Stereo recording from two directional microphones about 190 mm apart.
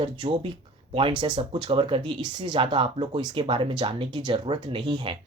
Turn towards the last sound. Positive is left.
turn(degrees=-25)  # may be behind; listen again after turning